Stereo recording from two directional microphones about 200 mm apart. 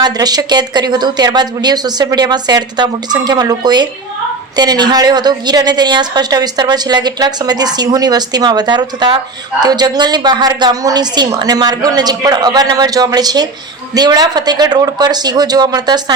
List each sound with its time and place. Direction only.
0.0 s a woman's voice: 20° right (ahead or behind)